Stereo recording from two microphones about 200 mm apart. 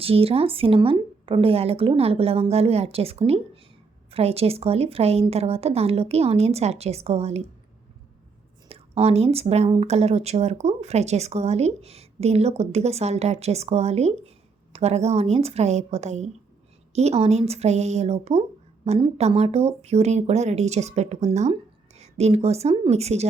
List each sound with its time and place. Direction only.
0.0 s speech: 30° right (ahead or behind)
8.7 s speech: 30° right (ahead or behind)